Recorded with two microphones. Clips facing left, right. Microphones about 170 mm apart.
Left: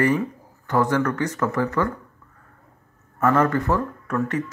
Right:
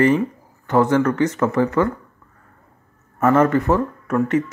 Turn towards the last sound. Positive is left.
turn(degrees=-20)  # may be behind; listen again after turning